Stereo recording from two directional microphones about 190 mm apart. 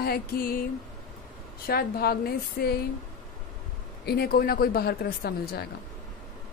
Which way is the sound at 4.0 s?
55° left (ahead or behind).